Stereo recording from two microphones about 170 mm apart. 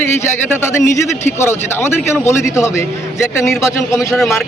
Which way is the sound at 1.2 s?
15° left (ahead or behind).